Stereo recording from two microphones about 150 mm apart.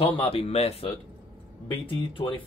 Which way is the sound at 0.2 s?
40° left (ahead or behind).